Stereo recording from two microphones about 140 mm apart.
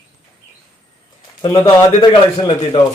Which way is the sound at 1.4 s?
30° left (ahead or behind).